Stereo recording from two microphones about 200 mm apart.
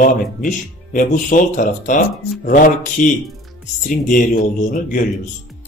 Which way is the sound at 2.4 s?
45° left (ahead or behind).